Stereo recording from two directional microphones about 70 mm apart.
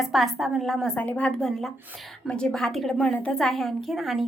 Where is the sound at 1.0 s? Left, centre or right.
Left.